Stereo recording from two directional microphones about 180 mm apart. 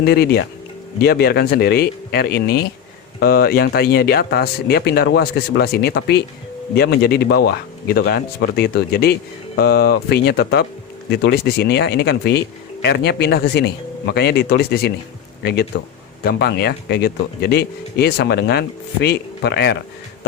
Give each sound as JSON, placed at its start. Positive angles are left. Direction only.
{"t": 0.0, "sound": "speech", "side_deg": 60}